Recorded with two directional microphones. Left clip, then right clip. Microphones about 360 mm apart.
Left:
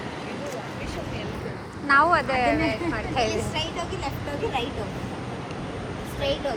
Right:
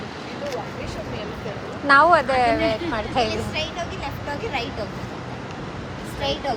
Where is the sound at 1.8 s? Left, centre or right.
Centre.